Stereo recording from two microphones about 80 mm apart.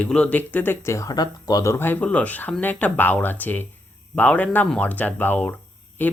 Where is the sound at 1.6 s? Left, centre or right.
Left.